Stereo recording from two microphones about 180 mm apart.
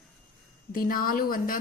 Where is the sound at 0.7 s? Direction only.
55° left (ahead or behind).